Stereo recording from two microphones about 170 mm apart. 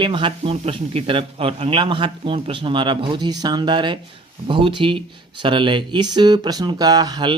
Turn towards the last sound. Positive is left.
turn(degrees=-25)  # may be behind; listen again after turning